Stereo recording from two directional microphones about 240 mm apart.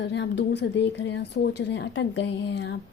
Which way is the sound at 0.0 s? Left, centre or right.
Left.